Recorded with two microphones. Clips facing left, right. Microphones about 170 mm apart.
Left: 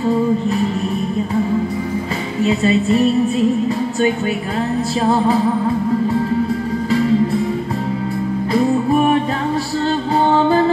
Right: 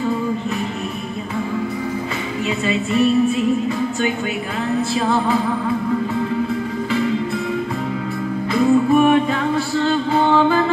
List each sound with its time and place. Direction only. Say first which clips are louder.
2.4 s music: left 7 dB; 35° left (ahead or behind)
5.0 s music: left 5 dB; 35° left (ahead or behind)
8.5 s music: right 1 dB; 35° left (ahead or behind)